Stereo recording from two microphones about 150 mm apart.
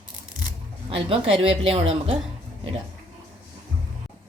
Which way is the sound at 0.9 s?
40° right (ahead or behind).